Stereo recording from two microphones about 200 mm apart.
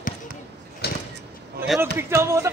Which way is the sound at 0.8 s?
55° left (ahead or behind).